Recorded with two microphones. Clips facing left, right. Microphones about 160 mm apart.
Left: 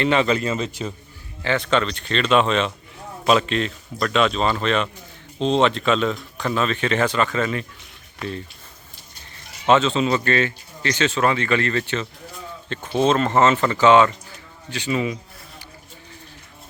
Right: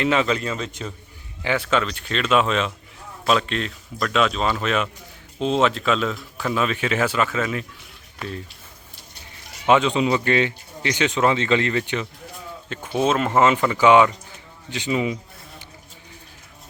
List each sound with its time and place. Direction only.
0.0 s speech: centre (ahead or behind)
1.4 s speech: 10° right (ahead or behind)
9.6 s speech: 15° right (ahead or behind)
14.7 s a sound: 20° right (ahead or behind)